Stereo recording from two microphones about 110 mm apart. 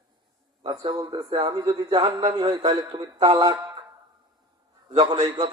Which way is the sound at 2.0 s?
65° right (ahead or behind).